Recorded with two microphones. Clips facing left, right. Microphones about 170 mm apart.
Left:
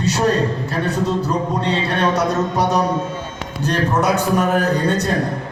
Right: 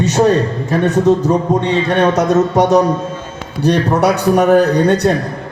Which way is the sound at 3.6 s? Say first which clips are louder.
Right 6 dB; 65° right (ahead or behind).